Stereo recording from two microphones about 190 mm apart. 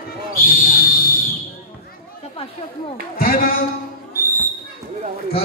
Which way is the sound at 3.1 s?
50° left (ahead or behind).